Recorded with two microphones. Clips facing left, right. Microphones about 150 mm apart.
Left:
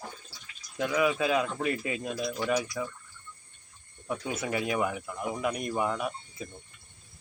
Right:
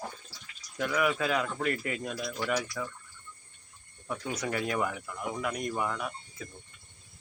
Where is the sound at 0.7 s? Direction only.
20° left (ahead or behind).